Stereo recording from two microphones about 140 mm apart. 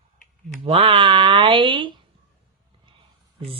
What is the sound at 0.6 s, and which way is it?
Speech, 40° right (ahead or behind).